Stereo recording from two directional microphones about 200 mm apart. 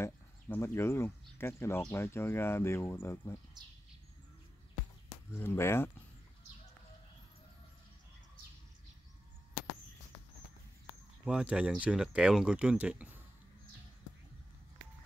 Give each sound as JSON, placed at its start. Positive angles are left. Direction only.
{"t": 0.0, "sound": "speech", "side_deg": 15}
{"t": 3.6, "sound": "speech", "side_deg": -20}
{"t": 5.3, "sound": "speech", "side_deg": 10}
{"t": 11.2, "sound": "speech", "side_deg": -5}